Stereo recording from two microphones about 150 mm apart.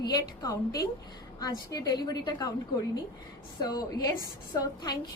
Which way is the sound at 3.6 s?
25° left (ahead or behind).